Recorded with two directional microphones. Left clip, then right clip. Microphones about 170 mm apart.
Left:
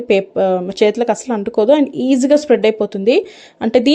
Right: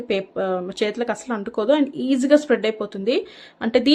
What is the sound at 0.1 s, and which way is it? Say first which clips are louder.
Speech: left 9 dB; 30° left (ahead or behind).